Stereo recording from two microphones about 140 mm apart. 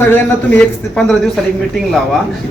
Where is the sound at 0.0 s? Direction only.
15° left (ahead or behind).